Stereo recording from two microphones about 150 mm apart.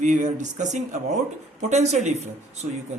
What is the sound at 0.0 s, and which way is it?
Speech, 55° right (ahead or behind).